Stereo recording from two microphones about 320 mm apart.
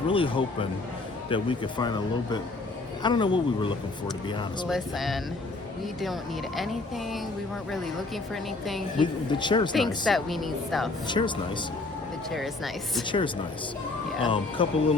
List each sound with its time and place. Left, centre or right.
0.1 s speech: centre
4.7 s a woman's voice: centre
6.6 s a woman's voice: centre
9.0 s speech: centre
9.7 s a woman's voice: centre
11.1 s speech: centre
12.3 s a woman's voice: centre
13.1 s speech: centre